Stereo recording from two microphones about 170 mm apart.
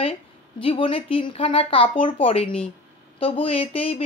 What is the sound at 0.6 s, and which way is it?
Speech, 30° left (ahead or behind).